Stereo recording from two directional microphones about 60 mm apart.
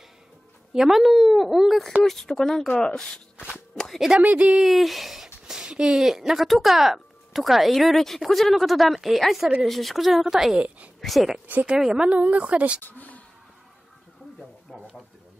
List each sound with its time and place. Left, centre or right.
0.7 s speech: centre
2.0 s speech: centre
3.7 s a sound: centre
4.2 s speech: right
4.6 s speech: centre
12.1 s speech: right
12.8 s a sound: left